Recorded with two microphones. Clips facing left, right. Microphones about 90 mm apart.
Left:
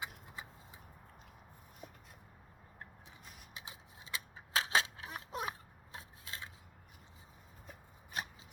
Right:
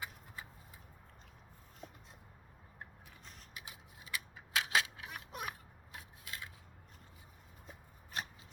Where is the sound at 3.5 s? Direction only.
25° left (ahead or behind).